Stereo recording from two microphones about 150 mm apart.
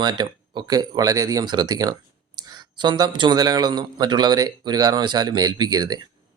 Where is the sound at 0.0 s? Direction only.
30° right (ahead or behind).